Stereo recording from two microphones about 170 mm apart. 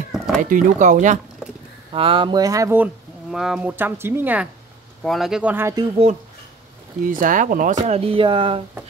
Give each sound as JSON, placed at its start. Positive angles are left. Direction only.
{"t": 0.4, "sound": "speech", "side_deg": -50}
{"t": 1.9, "sound": "speech", "side_deg": -30}
{"t": 3.3, "sound": "speech", "side_deg": -5}
{"t": 5.0, "sound": "speech", "side_deg": 0}
{"t": 7.1, "sound": "speech", "side_deg": -55}
{"t": 7.8, "sound": "speech", "side_deg": -35}